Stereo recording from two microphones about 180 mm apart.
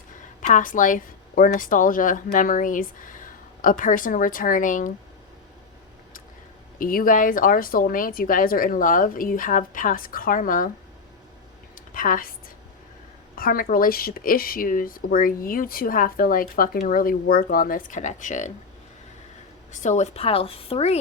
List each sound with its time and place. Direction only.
0.4 s a woman's voice: 45° left (ahead or behind)
6.7 s a woman's voice: 50° left (ahead or behind)
11.7 s a sound: 50° left (ahead or behind)
13.3 s a woman's voice: 55° left (ahead or behind)
19.7 s a woman's voice: 40° left (ahead or behind)